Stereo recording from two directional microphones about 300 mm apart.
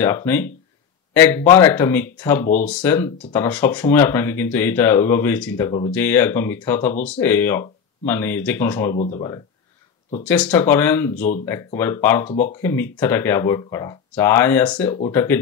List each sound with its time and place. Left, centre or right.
0.0 s speech: centre
8.9 s speech: left
10.2 s speech: centre
12.3 s speech: left
12.6 s speech: centre
14.9 s speech: centre